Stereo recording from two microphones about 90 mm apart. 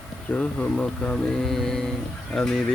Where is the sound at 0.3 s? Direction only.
15° left (ahead or behind).